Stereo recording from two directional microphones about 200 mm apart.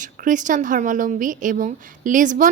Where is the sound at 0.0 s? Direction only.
40° right (ahead or behind).